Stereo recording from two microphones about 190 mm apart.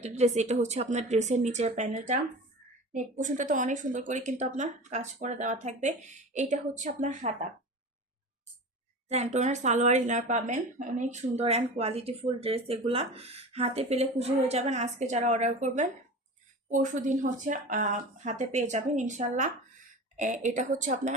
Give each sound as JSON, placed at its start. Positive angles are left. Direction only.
{"t": 0.0, "sound": "speech", "side_deg": -35}
{"t": 9.0, "sound": "speech", "side_deg": -35}